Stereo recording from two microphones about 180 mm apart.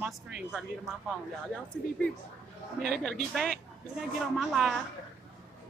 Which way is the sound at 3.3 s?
5° left (ahead or behind).